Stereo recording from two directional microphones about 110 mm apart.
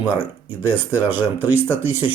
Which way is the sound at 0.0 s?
15° right (ahead or behind).